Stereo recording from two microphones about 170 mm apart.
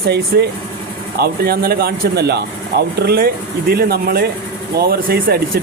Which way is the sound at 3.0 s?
60° right (ahead or behind).